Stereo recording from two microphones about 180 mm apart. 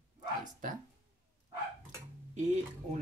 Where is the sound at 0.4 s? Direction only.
45° right (ahead or behind).